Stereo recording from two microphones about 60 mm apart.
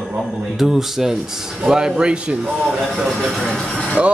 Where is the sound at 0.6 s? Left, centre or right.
Centre.